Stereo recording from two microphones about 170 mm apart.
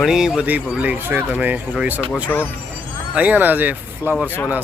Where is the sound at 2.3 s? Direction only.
10° left (ahead or behind).